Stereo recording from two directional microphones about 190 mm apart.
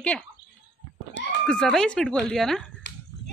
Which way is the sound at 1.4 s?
5° left (ahead or behind).